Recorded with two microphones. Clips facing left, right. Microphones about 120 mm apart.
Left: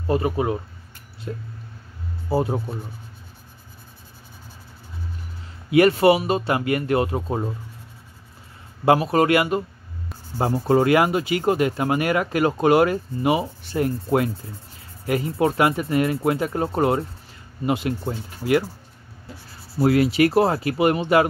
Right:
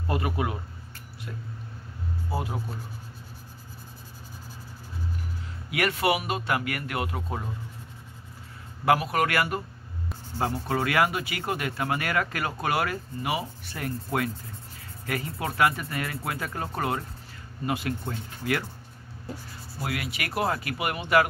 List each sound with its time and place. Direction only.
0.1 s speech: 30° left (ahead or behind)
2.2 s speech: 30° left (ahead or behind)
5.7 s speech: 30° left (ahead or behind)
8.8 s speech: 30° left (ahead or behind)
10.3 s speech: 35° left (ahead or behind)
19.8 s speech: 35° left (ahead or behind)